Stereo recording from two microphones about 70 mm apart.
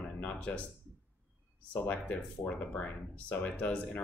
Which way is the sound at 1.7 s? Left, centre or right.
Centre.